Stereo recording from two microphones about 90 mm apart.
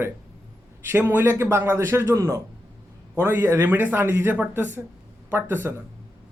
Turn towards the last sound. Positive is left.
turn(degrees=-25)  # may be behind; listen again after turning